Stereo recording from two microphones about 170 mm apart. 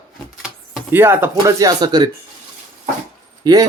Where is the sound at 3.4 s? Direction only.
20° right (ahead or behind).